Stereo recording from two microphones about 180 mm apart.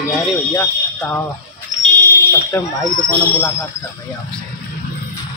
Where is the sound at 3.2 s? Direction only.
15° left (ahead or behind).